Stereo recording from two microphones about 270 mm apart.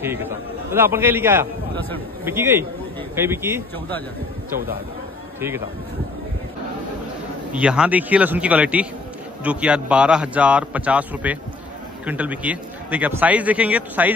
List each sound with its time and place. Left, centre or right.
0.0 s a man's voice: centre
7.5 s a man's voice: centre